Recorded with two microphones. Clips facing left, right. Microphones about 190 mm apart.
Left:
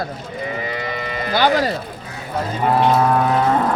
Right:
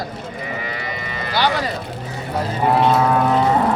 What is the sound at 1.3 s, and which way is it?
Speech, 45° left (ahead or behind).